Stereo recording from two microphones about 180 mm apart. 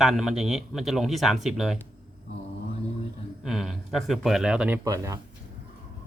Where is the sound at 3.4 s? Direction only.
Centre (ahead or behind).